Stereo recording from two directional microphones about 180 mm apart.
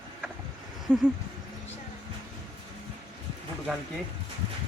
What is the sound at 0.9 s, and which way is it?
Speech, 5° left (ahead or behind).